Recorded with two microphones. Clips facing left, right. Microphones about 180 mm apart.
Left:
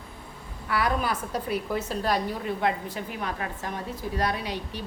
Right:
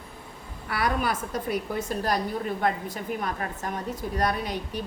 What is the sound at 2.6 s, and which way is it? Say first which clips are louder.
A woman's voice: even; 45° right (ahead or behind).